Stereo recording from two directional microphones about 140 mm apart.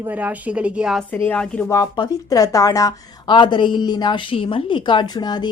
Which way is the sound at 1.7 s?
25° left (ahead or behind).